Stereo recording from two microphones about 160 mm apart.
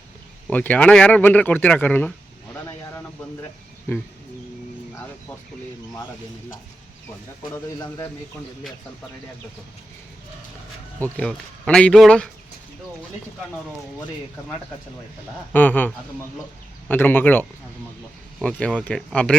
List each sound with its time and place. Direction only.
0.5 s speech: 10° left (ahead or behind)
7.5 s a man's voice: 20° left (ahead or behind)
11.0 s speech: 5° left (ahead or behind)
15.5 s speech: 10° left (ahead or behind)
16.9 s speech: 10° left (ahead or behind)